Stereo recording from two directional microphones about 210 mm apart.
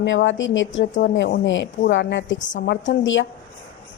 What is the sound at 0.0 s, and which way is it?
Speech, 60° left (ahead or behind).